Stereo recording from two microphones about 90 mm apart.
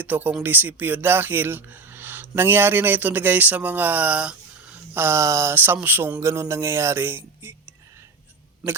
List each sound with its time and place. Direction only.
0.0 s speech: 20° right (ahead or behind)
4.9 s music: 30° right (ahead or behind)
5.5 s speech: 20° right (ahead or behind)
6.1 s music: 35° right (ahead or behind)
7.4 s speech: 25° right (ahead or behind)
8.6 s speech: 5° right (ahead or behind)